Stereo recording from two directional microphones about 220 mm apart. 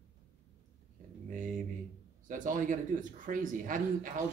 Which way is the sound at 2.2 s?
35° right (ahead or behind).